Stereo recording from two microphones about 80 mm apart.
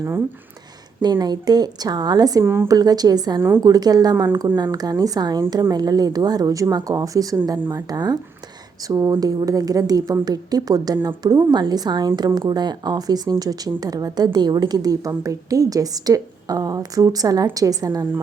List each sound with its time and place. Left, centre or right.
1.0 s speech: right
2.4 s speech: right
2.6 s a woman's voice: right